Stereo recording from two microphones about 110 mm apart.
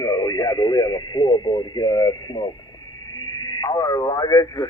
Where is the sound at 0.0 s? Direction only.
35° left (ahead or behind).